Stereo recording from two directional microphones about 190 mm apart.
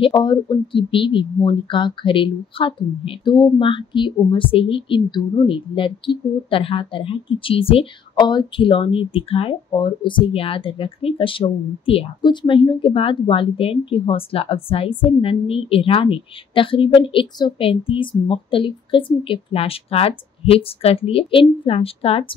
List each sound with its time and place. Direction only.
0.0 s speech: 25° left (ahead or behind)